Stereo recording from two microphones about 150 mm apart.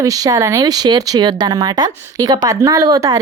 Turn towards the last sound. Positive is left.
turn(degrees=-25)  # may be behind; listen again after turning